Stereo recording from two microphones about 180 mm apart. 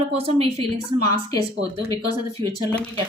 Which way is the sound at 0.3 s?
30° right (ahead or behind).